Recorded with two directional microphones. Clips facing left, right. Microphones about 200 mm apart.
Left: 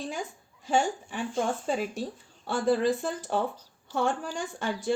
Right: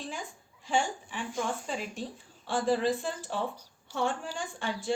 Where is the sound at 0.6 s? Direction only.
40° left (ahead or behind).